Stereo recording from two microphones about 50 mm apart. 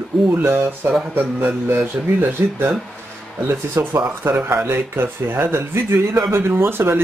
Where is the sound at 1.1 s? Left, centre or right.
Right.